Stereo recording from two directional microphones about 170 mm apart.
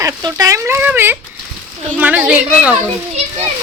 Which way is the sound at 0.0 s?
20° right (ahead or behind).